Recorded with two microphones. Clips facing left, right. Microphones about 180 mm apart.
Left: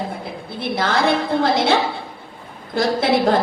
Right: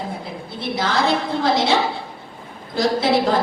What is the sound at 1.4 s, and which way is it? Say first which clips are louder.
Speech: even; 55° left (ahead or behind).